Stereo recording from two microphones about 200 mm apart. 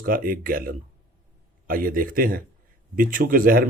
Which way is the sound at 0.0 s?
45° right (ahead or behind).